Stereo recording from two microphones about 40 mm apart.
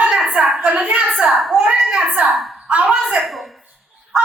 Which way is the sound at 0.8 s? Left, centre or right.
Right.